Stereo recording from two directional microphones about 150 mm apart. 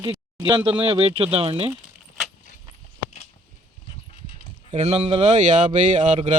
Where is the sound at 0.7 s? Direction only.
35° right (ahead or behind).